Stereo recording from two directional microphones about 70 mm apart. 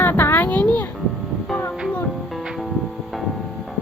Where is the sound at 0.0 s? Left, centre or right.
Left.